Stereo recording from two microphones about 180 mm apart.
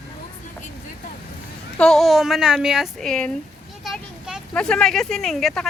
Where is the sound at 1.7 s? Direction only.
Centre (ahead or behind).